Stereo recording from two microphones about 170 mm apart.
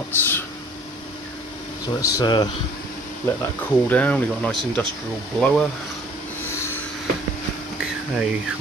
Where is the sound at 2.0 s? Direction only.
25° left (ahead or behind).